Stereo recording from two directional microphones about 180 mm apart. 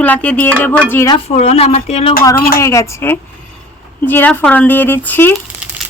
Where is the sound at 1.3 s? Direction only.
40° left (ahead or behind).